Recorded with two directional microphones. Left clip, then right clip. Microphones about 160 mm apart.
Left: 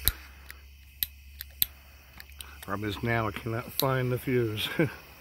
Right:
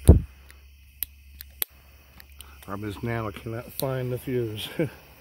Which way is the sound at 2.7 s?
15° left (ahead or behind).